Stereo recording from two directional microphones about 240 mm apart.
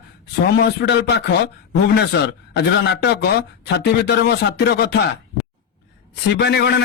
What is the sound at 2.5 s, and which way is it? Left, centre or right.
Speech, left.